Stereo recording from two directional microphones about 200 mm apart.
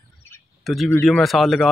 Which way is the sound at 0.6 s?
Centre (ahead or behind).